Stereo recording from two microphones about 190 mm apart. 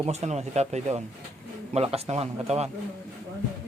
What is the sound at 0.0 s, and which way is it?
Speech, 35° right (ahead or behind).